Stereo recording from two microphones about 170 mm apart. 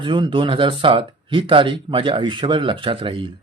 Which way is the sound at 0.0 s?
30° right (ahead or behind).